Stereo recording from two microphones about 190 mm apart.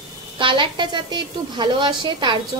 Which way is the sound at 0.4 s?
25° right (ahead or behind).